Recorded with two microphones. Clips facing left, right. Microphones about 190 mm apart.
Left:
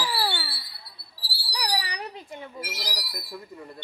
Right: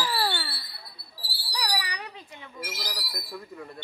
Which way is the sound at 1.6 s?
30° left (ahead or behind).